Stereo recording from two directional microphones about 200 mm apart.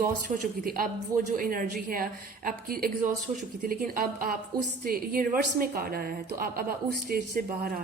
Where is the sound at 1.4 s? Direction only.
45° right (ahead or behind).